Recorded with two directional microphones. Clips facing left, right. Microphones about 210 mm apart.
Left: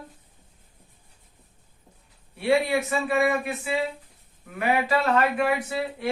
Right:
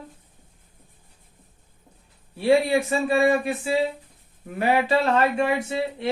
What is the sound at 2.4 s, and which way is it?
Speech, 30° right (ahead or behind).